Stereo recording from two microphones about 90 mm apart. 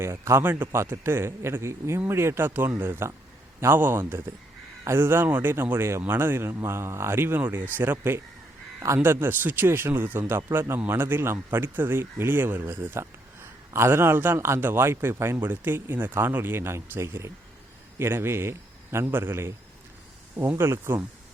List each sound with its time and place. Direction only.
0.0 s speech: 30° right (ahead or behind)